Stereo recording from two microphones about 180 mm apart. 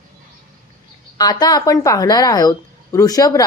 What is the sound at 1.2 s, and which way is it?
Speech, 20° left (ahead or behind).